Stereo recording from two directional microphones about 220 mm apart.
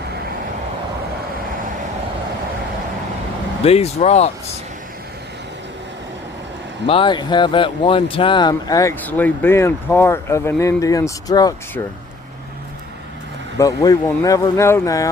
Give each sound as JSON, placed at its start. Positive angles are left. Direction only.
{"t": 3.6, "sound": "speech", "side_deg": 25}
{"t": 6.8, "sound": "speech", "side_deg": 25}
{"t": 13.6, "sound": "speech", "side_deg": 15}